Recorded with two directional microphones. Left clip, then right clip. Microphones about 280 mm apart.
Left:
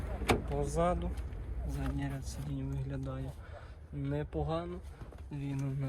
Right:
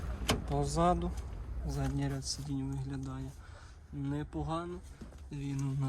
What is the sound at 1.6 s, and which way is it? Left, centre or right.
Speech, right.